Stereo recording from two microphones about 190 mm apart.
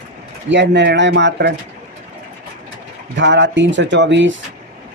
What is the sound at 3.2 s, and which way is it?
Speech, 70° right (ahead or behind).